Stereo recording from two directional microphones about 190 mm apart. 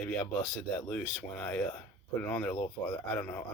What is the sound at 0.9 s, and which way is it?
Speech, 5° left (ahead or behind).